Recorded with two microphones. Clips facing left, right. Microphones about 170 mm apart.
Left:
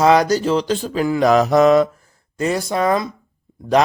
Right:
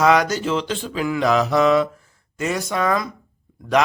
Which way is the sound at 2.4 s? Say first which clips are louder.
Left 3 dB; 35° left (ahead or behind).